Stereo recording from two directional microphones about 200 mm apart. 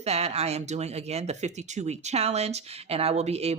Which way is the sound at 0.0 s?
30° right (ahead or behind).